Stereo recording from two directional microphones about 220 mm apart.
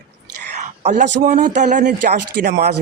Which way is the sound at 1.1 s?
40° right (ahead or behind).